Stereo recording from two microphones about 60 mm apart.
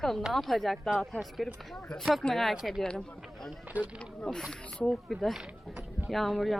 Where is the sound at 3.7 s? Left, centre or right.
Right.